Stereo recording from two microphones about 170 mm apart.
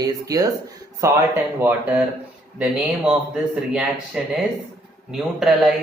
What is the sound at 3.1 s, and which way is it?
Speech, 5° right (ahead or behind).